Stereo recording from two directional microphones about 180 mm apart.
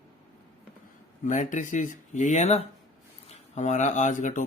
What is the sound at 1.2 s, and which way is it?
Speech, 45° left (ahead or behind).